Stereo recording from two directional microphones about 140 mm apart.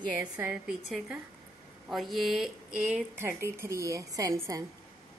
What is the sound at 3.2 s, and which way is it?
A woman's voice, 15° right (ahead or behind).